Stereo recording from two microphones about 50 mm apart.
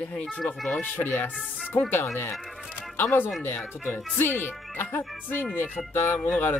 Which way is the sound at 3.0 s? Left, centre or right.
Left.